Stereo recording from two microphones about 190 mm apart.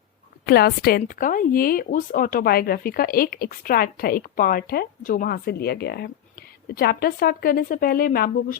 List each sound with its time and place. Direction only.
0.4 s speech: 55° left (ahead or behind)